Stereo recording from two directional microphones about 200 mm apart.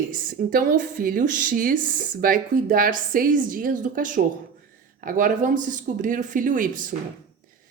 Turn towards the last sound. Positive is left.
turn(degrees=-40)  # may be behind; listen again after turning